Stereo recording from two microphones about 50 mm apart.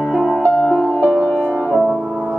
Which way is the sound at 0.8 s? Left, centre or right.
Left.